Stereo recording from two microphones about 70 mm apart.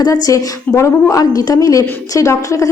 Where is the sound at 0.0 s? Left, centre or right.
Left.